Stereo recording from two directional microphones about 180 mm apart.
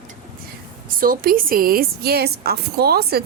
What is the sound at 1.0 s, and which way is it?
A woman's voice, 55° right (ahead or behind).